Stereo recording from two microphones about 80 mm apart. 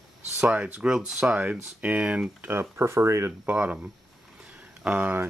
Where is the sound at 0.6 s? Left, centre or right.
Centre.